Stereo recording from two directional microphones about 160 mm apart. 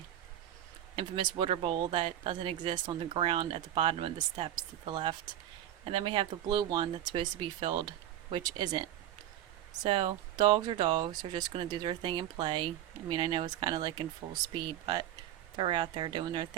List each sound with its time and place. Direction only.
0.9 s speech: 30° right (ahead or behind)